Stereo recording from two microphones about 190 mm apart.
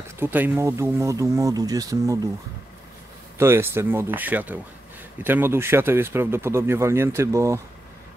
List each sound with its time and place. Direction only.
0.2 s speech: 10° right (ahead or behind)
3.3 s speech: 15° right (ahead or behind)